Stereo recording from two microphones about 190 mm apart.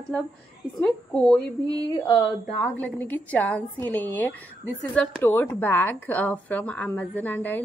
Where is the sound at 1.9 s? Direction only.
20° left (ahead or behind).